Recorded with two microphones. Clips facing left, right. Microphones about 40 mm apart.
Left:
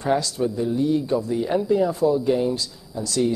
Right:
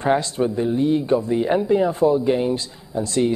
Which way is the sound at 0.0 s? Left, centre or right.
Right.